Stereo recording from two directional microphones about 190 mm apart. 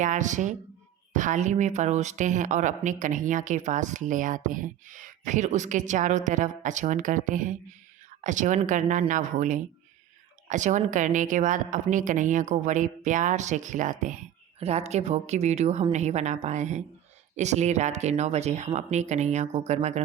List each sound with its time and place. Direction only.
0.0 s speech: 40° right (ahead or behind)